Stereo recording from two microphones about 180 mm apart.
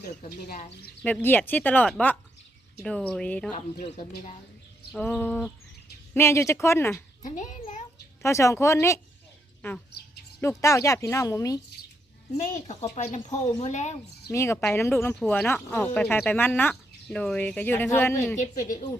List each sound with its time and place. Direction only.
0.3 s speech: 50° left (ahead or behind)
1.0 s speech: 10° left (ahead or behind)
4.9 s speech: 5° left (ahead or behind)
7.2 s a child's voice: 45° left (ahead or behind)
8.2 s speech: 15° left (ahead or behind)
12.4 s speech: 40° left (ahead or behind)
14.3 s speech: 15° left (ahead or behind)